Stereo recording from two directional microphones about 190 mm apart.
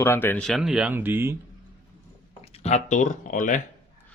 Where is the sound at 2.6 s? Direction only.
40° left (ahead or behind).